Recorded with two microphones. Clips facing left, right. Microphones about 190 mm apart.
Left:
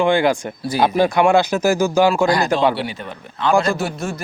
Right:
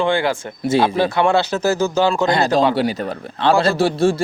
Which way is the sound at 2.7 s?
40° right (ahead or behind).